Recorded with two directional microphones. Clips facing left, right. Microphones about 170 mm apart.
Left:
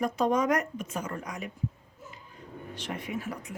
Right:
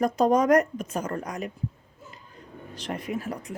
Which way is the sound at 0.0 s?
40° right (ahead or behind).